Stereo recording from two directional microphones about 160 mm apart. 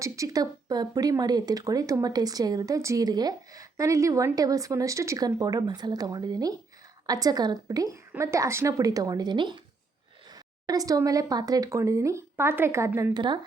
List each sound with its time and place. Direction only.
0.0 s speech: 20° right (ahead or behind)
13.1 s speech: 30° right (ahead or behind)